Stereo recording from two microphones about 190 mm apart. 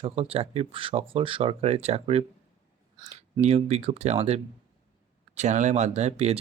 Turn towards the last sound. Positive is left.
turn(degrees=-35)  # may be behind; listen again after turning